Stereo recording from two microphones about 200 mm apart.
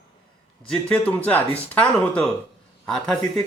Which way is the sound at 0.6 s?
5° left (ahead or behind).